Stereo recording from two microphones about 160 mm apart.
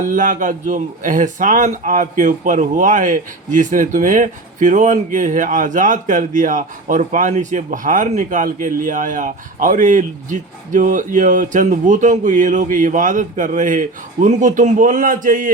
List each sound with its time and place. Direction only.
0.1 s speech: 55° right (ahead or behind)